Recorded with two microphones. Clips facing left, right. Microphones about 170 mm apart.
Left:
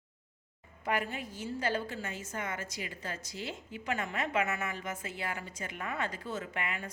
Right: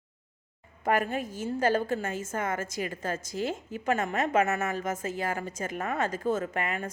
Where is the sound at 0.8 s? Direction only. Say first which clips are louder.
Right 7 dB; 50° right (ahead or behind).